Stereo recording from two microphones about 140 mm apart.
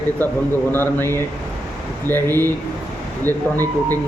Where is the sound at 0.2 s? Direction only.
10° left (ahead or behind).